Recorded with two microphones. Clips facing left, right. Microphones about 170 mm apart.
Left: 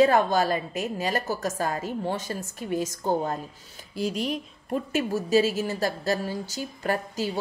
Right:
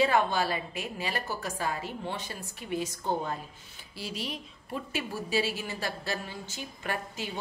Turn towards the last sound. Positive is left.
turn(degrees=40)  # may be behind; listen again after turning